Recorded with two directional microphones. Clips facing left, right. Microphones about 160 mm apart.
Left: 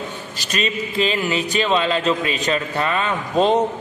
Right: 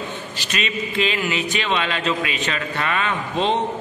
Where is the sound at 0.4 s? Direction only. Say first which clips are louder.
Left 3 dB; 40° left (ahead or behind).